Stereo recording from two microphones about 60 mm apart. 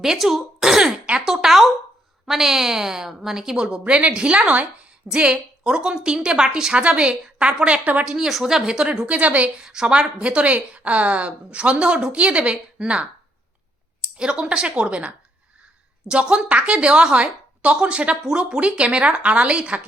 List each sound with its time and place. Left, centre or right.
0.0 s a woman's voice: centre; by 8.0 s right
8.0 s a woman's voice: centre
14.2 s a woman's voice: centre